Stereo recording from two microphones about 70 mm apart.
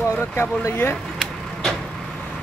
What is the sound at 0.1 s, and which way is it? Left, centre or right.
Speech, left.